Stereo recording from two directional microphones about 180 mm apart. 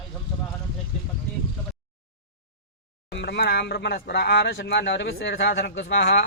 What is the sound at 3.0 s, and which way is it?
Speech, 65° left (ahead or behind).